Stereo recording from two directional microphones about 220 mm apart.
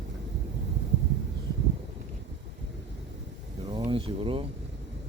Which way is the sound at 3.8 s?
25° right (ahead or behind).